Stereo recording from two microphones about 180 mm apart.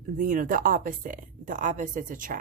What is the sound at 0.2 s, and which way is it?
A woman's voice, 45° right (ahead or behind).